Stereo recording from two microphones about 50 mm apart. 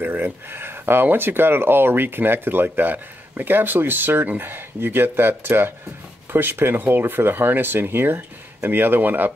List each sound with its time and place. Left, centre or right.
0.0 s speech: right